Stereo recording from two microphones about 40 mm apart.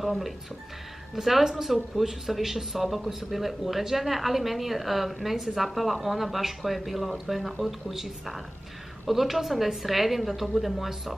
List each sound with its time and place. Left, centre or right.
0.0 s speech: centre